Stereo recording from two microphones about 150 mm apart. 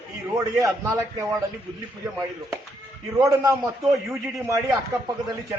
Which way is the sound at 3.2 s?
25° right (ahead or behind).